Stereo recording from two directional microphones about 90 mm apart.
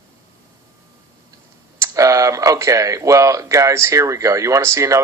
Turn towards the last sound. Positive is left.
turn(degrees=-35)  # may be behind; listen again after turning